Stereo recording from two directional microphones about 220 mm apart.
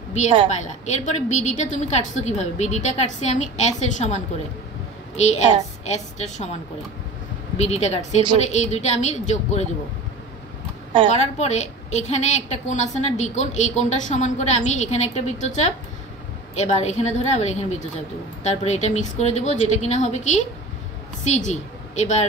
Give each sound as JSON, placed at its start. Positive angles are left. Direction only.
{"t": 0.5, "sound": "a woman's voice", "side_deg": 30}
{"t": 7.5, "sound": "a woman's voice", "side_deg": 30}
{"t": 11.1, "sound": "a woman's voice", "side_deg": 30}